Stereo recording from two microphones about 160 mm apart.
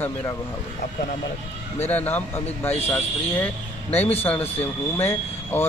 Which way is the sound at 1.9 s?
10° left (ahead or behind).